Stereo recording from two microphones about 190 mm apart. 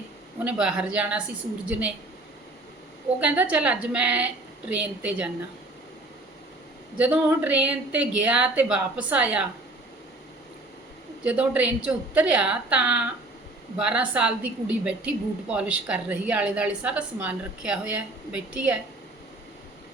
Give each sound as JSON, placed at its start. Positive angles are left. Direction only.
{"t": 0.4, "sound": "a woman's voice", "side_deg": -5}
{"t": 3.2, "sound": "a woman's voice", "side_deg": -10}
{"t": 7.0, "sound": "a woman's voice", "side_deg": -10}
{"t": 11.2, "sound": "a woman's voice", "side_deg": -5}